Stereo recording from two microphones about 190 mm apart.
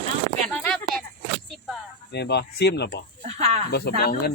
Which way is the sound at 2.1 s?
60° left (ahead or behind).